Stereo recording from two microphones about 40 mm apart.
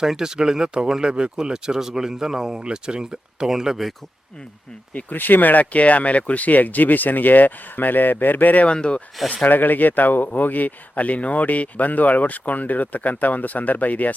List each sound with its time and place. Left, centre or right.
0.0 s speech: centre
5.1 s speech: left
8.6 s speech: left
9.3 s speech: left